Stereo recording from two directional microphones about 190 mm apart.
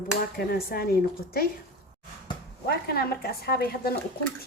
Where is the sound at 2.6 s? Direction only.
55° left (ahead or behind).